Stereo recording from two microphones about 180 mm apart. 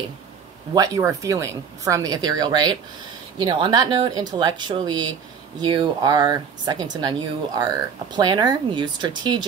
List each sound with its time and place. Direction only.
0.7 s speech: 20° right (ahead or behind)